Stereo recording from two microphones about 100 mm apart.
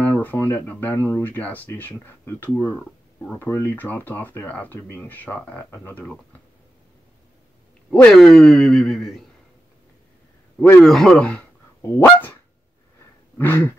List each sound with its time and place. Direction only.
0.0 s speech: 20° left (ahead or behind)
7.9 s speech: 5° left (ahead or behind)
10.8 s speech: 5° left (ahead or behind)
12.0 s honk: 20° left (ahead or behind)
13.4 s speech: 20° left (ahead or behind)